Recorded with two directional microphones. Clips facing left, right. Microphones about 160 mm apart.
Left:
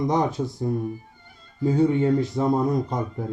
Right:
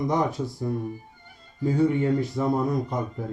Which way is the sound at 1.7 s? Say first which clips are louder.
Left 2 dB; 20° left (ahead or behind).